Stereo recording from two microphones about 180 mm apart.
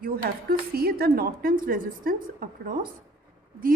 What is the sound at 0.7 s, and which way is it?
A woman's voice, 55° right (ahead or behind).